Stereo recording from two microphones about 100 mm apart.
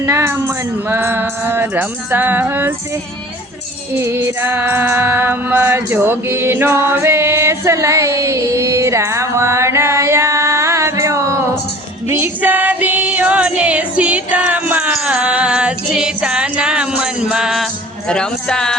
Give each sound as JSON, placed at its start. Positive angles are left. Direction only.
{"t": 0.0, "sound": "music", "side_deg": -25}
{"t": 3.9, "sound": "music", "side_deg": -25}
{"t": 12.0, "sound": "female singing", "side_deg": -25}
{"t": 18.1, "sound": "speech", "side_deg": 10}